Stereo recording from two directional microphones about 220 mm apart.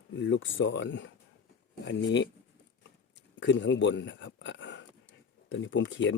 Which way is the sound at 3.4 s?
55° left (ahead or behind).